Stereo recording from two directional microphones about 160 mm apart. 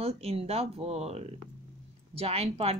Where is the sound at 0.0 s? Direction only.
40° right (ahead or behind).